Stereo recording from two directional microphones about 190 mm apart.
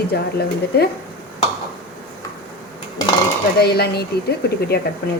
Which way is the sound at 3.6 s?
60° left (ahead or behind).